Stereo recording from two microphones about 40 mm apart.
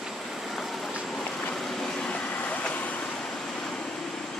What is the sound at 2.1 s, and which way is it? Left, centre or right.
Vehicle, left.